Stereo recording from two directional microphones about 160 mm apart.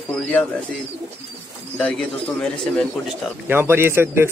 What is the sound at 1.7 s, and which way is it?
Speech, 5° left (ahead or behind).